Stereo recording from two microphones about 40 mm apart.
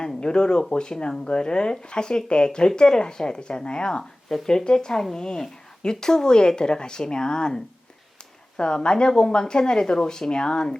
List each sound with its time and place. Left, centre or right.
0.0 s speech: left